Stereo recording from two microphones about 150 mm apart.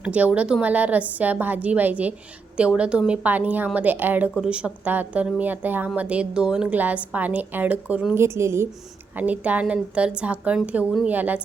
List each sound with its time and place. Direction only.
0.0 s a woman's voice: 10° right (ahead or behind)